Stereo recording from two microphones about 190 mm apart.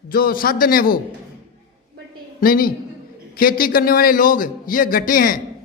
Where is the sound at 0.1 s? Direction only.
50° left (ahead or behind).